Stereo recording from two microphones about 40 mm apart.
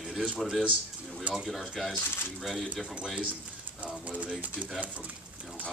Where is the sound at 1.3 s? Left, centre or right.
Right.